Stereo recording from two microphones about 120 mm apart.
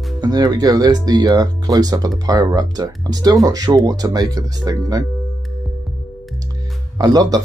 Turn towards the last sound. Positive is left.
turn(degrees=-30)  # may be behind; listen again after turning